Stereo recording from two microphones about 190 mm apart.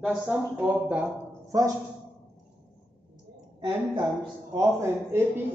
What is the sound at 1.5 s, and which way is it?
Speech, 20° right (ahead or behind).